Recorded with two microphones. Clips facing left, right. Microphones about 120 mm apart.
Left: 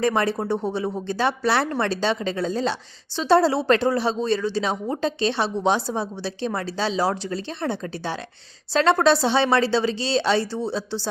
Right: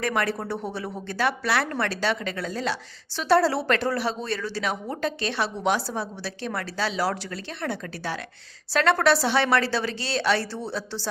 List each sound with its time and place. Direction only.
0.0 s speech: 25° left (ahead or behind)